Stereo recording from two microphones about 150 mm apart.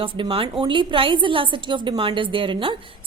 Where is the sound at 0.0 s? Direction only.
35° right (ahead or behind).